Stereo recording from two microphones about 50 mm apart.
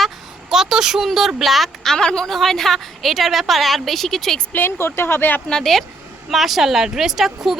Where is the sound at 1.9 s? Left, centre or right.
Centre.